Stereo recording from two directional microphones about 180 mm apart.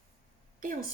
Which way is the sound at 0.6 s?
50° right (ahead or behind).